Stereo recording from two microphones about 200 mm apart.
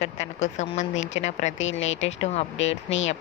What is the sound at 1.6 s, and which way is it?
Speech, 70° left (ahead or behind).